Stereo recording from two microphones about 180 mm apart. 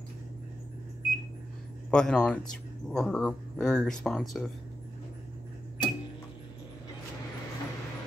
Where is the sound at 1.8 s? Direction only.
5° left (ahead or behind).